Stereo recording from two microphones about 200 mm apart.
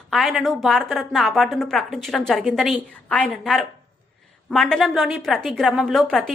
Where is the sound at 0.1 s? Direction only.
Centre (ahead or behind).